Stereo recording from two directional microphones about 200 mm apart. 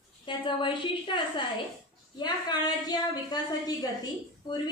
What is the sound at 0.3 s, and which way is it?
Speech, 25° left (ahead or behind).